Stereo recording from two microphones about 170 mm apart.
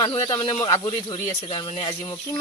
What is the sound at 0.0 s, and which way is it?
Speech, 25° left (ahead or behind).